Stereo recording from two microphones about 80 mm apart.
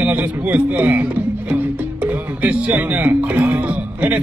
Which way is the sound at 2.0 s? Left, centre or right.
Centre.